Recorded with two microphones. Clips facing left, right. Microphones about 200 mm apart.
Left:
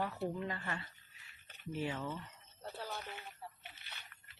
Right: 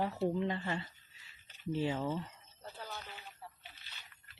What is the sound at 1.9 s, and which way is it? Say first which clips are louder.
Speech: right 6 dB; 40° right (ahead or behind).